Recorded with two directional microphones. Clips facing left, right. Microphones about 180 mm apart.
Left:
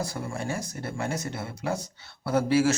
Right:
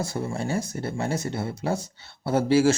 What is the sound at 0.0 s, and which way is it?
Speech, 25° right (ahead or behind).